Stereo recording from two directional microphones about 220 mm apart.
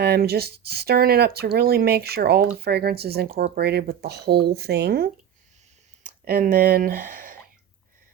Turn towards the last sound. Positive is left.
turn(degrees=-40)  # may be behind; listen again after turning